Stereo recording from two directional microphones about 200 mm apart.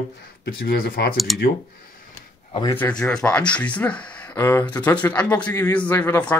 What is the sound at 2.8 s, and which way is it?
Speech, 5° left (ahead or behind).